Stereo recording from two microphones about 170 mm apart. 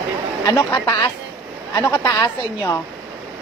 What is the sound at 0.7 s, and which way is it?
A woman's voice, 30° left (ahead or behind).